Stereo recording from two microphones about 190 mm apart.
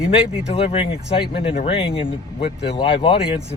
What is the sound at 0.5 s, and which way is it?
Speech, 30° left (ahead or behind).